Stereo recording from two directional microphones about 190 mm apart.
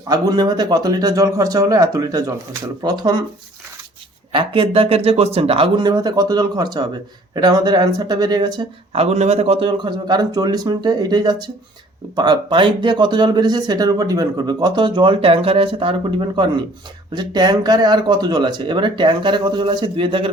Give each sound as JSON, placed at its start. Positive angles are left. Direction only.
{"t": 0.1, "sound": "speech", "side_deg": -20}
{"t": 4.3, "sound": "speech", "side_deg": -25}